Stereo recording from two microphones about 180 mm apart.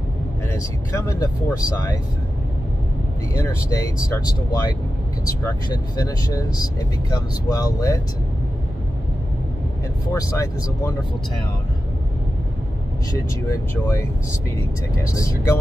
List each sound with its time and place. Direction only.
0.5 s speech: 15° left (ahead or behind)
3.3 s speech: 15° left (ahead or behind)
10.1 s speech: 15° left (ahead or behind)
13.5 s speech: 15° left (ahead or behind)